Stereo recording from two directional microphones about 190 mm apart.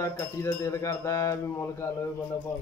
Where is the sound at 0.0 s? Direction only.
15° left (ahead or behind).